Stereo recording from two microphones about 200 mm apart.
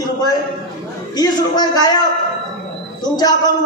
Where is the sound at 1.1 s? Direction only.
20° left (ahead or behind).